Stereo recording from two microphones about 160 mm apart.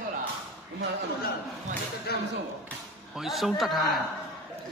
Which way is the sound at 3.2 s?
Centre (ahead or behind).